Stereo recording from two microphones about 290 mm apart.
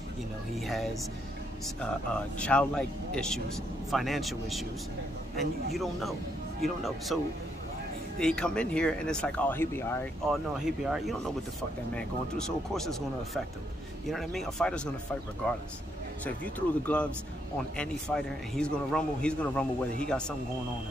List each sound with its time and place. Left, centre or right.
1.8 s speech: centre
5.8 s speech: centre
8.2 s speech: centre
16.5 s speech: centre